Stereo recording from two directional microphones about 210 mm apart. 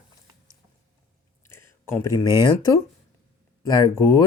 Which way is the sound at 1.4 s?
10° left (ahead or behind).